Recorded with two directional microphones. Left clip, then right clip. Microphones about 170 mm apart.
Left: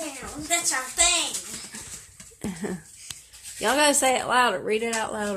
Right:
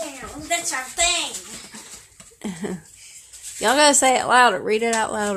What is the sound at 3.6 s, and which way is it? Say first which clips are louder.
Speech: right 5 dB; 25° right (ahead or behind).